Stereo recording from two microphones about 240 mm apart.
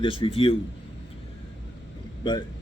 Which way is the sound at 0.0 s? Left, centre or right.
Left.